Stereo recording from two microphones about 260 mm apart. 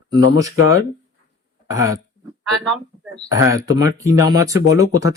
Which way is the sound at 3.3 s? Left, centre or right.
Centre.